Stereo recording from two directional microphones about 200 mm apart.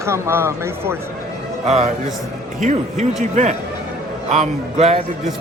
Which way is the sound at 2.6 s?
35° right (ahead or behind).